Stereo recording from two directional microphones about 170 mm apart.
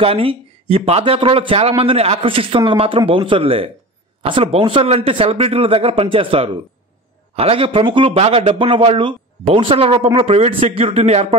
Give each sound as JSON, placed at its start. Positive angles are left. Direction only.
{"t": 0.0, "sound": "speech", "side_deg": -35}